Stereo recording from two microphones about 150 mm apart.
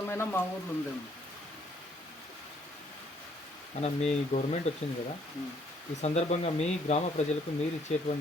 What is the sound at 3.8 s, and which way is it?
Speech, 50° left (ahead or behind).